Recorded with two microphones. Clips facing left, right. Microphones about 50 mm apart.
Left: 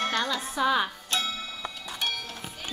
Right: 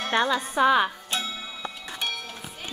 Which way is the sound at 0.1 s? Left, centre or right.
Right.